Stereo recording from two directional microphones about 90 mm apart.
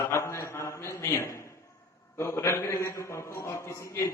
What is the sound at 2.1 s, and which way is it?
A man's voice, 30° left (ahead or behind).